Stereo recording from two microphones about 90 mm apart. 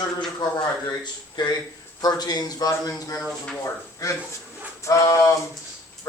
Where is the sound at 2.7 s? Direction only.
40° left (ahead or behind).